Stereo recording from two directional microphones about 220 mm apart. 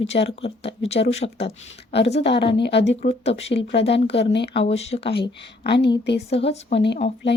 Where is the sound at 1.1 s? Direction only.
30° left (ahead or behind).